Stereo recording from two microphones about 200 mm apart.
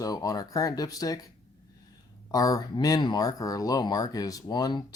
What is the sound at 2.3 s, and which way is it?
Speech, 20° left (ahead or behind).